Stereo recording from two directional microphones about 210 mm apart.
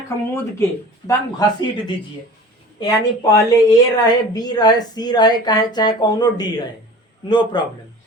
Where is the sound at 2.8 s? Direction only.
15° left (ahead or behind).